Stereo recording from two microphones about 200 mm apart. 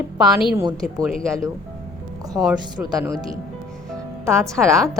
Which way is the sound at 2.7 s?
20° right (ahead or behind).